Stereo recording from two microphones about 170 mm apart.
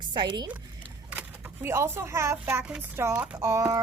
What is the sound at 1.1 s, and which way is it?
A woman's voice, 15° right (ahead or behind).